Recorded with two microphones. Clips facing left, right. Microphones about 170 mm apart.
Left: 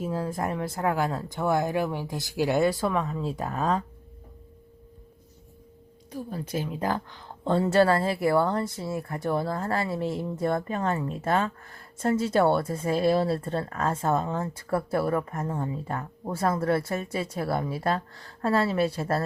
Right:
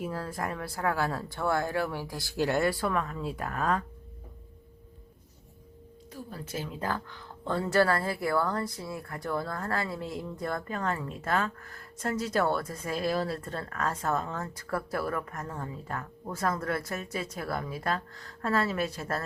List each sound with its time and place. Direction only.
0.0 s speech: 20° left (ahead or behind)
6.1 s speech: 15° left (ahead or behind)